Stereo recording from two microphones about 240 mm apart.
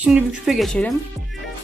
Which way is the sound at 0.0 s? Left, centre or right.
Centre.